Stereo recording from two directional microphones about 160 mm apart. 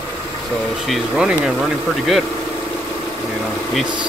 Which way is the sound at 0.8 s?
Centre (ahead or behind).